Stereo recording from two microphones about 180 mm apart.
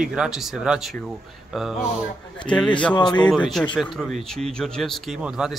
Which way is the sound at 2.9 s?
25° left (ahead or behind).